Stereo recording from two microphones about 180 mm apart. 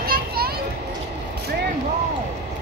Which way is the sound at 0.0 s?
55° right (ahead or behind).